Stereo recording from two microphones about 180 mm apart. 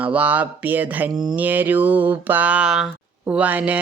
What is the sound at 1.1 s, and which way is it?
Speech, 20° right (ahead or behind).